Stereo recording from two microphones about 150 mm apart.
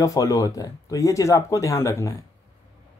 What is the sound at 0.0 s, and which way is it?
Speech, 20° left (ahead or behind).